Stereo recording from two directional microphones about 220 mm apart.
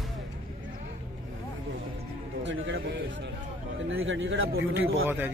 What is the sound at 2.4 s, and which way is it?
A man's voice, 55° right (ahead or behind).